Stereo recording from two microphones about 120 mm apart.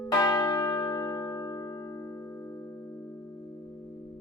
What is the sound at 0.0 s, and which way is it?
Church bell, 25° left (ahead or behind).